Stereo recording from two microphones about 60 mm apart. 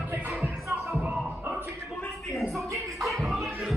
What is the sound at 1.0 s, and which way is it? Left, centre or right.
Music, right.